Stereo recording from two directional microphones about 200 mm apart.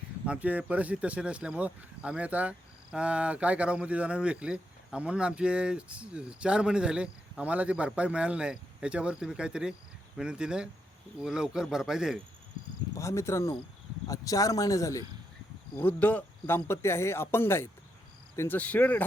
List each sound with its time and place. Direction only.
0.3 s speech: 10° right (ahead or behind)
13.0 s speech: 15° left (ahead or behind)